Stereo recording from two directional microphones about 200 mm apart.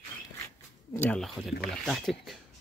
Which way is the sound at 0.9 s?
10° left (ahead or behind).